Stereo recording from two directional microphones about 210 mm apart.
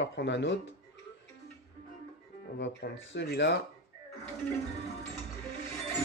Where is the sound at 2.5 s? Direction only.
60° left (ahead or behind).